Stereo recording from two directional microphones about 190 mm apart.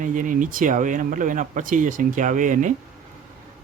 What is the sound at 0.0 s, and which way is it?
Speech, 45° right (ahead or behind).